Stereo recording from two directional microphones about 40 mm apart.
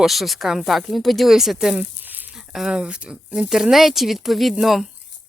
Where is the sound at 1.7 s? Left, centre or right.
Right.